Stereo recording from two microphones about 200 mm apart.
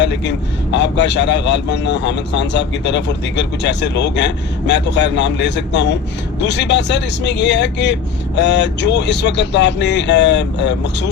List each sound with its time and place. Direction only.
0.0 s speech: 60° left (ahead or behind)